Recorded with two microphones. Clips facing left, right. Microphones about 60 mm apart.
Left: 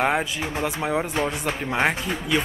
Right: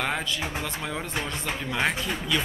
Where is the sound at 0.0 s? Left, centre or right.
Centre.